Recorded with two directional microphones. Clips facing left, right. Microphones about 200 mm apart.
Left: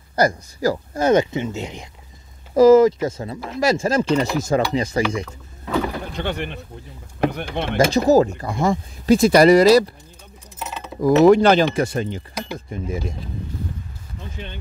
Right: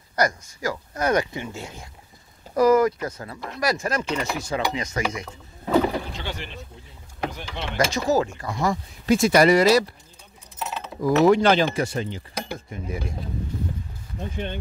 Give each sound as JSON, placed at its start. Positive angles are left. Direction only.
{"t": 0.1, "sound": "speech", "side_deg": 30}
{"t": 6.1, "sound": "speech", "side_deg": 55}
{"t": 7.9, "sound": "speech", "side_deg": 40}
{"t": 11.0, "sound": "speech", "side_deg": 45}
{"t": 12.7, "sound": "speech", "side_deg": 30}